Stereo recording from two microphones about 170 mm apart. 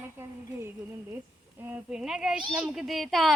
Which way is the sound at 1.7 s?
5° right (ahead or behind).